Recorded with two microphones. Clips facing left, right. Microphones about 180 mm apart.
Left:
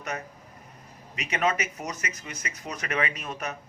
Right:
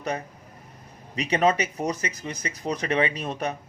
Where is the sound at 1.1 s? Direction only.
35° right (ahead or behind).